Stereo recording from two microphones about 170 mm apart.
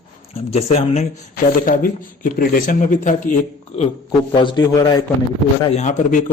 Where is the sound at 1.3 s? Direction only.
55° left (ahead or behind).